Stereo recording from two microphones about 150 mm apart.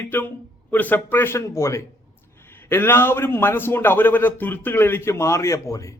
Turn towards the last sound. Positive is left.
turn(degrees=20)  # may be behind; listen again after turning